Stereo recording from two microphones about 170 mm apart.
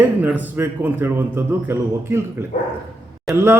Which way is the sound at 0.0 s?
10° right (ahead or behind).